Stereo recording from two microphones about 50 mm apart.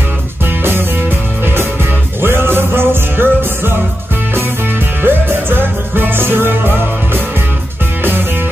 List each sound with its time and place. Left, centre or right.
2.2 s music: right
5.0 s music: right